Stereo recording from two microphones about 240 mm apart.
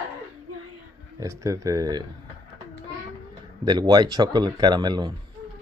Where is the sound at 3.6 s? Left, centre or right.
Centre.